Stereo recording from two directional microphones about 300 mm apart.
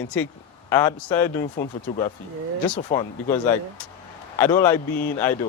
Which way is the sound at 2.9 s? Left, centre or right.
Left.